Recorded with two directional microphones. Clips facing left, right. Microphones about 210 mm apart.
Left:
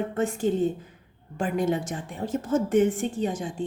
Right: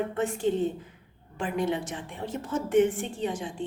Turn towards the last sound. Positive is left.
turn(degrees=45)  # may be behind; listen again after turning